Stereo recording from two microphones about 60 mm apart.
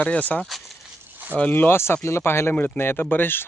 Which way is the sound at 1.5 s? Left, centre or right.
Left.